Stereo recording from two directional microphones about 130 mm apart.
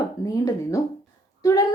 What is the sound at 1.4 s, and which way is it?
Speech, 25° left (ahead or behind).